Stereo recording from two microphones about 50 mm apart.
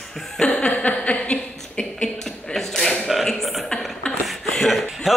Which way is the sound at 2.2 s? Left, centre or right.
Centre.